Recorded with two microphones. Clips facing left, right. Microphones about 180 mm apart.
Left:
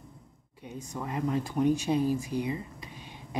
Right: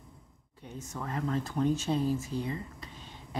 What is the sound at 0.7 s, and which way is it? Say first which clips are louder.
Speech: left 2 dB; 15° left (ahead or behind).